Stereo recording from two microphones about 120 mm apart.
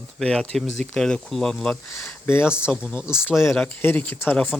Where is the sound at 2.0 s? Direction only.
20° left (ahead or behind).